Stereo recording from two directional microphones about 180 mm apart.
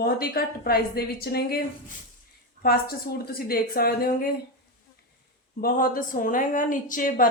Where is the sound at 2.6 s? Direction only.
55° left (ahead or behind).